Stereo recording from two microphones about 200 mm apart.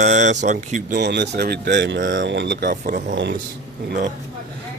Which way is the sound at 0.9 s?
55° right (ahead or behind).